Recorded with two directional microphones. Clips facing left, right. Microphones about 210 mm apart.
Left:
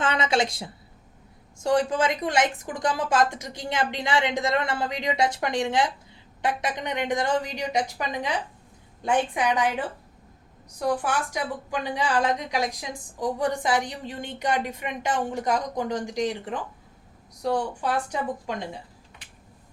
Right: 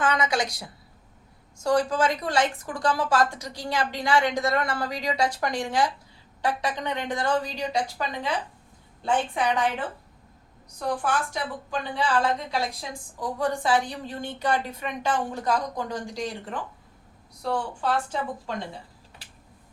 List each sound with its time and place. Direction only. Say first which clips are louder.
0.0 s a woman's voice: left 1 dB; 25° left (ahead or behind)
10.8 s a woman's voice: left 1 dB; 15° left (ahead or behind)